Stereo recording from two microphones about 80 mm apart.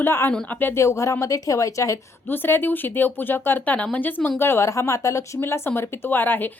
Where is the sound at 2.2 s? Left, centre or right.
Left.